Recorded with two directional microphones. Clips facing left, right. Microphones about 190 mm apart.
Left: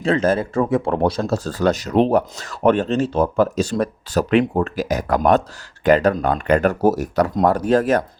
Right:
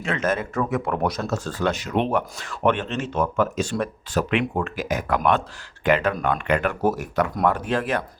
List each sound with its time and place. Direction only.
0.0 s speech: 35° left (ahead or behind)